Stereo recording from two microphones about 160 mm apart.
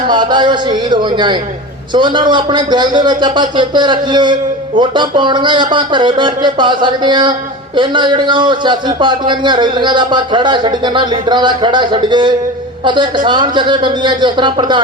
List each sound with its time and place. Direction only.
0.1 s a man's voice: 30° right (ahead or behind)